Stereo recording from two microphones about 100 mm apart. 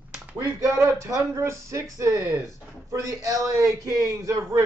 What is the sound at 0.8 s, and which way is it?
A man's voice, 35° right (ahead or behind).